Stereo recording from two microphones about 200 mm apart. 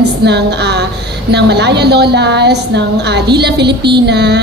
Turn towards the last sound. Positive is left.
turn(degrees=-55)  # may be behind; listen again after turning